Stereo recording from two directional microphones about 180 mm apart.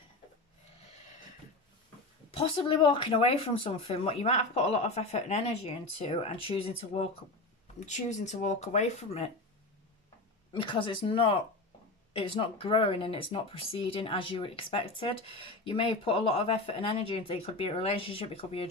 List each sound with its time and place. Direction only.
2.3 s speech: 30° left (ahead or behind)
10.5 s speech: 25° left (ahead or behind)